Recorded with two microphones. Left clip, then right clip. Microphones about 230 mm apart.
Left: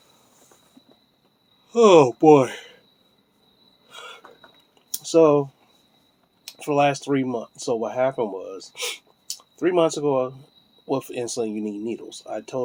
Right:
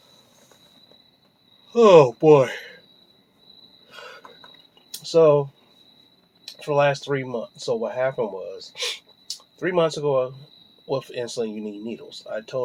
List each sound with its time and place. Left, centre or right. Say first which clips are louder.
1.7 s speech: right 1 dB; left
3.8 s train wheels squealing: left 1 dB; left
5.0 s speech: even; left